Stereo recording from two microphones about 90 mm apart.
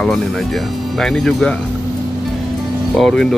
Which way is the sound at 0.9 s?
5° left (ahead or behind).